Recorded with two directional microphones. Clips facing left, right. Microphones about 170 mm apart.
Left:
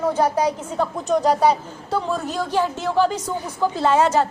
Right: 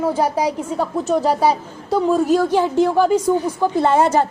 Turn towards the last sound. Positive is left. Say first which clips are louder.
# right 2 dB
turn(degrees=-10)  # may be behind; listen again after turning